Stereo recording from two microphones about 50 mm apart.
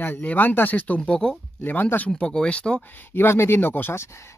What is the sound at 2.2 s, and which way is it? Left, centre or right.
Speech, centre.